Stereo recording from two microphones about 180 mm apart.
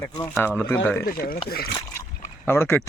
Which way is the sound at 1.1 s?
55° left (ahead or behind).